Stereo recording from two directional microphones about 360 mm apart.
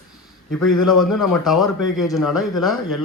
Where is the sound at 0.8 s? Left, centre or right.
Left.